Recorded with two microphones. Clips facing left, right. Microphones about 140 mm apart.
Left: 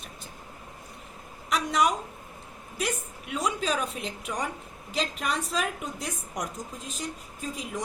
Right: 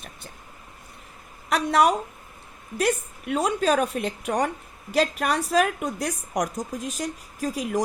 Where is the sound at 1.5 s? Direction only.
55° right (ahead or behind).